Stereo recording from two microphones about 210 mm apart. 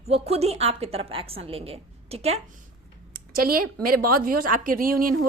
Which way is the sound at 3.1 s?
45° right (ahead or behind).